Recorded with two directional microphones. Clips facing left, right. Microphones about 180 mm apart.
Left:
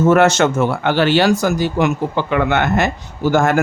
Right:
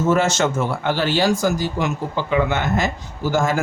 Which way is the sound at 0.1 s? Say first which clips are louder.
Left 4 dB; 65° left (ahead or behind).